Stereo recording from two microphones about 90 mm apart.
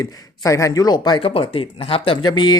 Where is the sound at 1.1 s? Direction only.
85° left.